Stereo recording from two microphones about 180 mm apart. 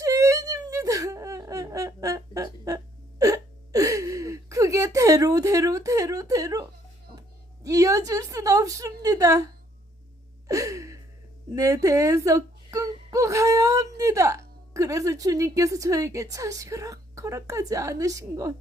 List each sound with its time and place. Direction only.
0.0 s whimper: 20° right (ahead or behind)
7.2 s a sound: 20° right (ahead or behind)
10.5 s gasp: 20° right (ahead or behind)
11.5 s whimper: 20° right (ahead or behind)